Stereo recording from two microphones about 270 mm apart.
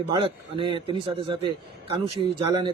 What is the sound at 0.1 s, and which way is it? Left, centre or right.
Speech, centre.